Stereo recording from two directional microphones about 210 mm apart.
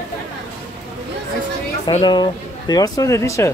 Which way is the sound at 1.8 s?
20° left (ahead or behind).